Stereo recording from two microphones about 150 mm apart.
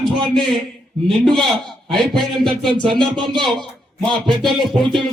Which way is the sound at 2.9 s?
30° right (ahead or behind).